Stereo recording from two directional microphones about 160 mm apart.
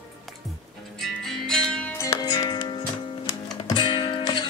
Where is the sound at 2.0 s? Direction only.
25° left (ahead or behind).